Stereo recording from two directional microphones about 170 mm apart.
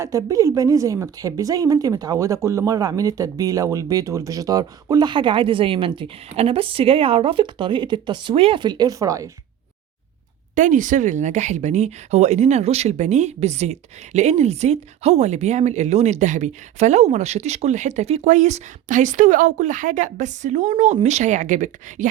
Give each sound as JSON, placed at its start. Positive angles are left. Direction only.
{"t": 0.0, "sound": "a woman's voice", "side_deg": -20}
{"t": 10.5, "sound": "speech", "side_deg": -50}